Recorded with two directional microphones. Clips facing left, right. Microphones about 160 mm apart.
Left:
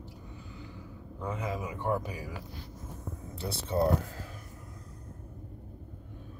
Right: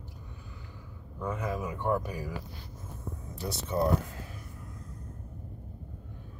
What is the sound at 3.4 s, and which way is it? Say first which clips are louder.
Speech: left 1 dB; 30° left (ahead or behind).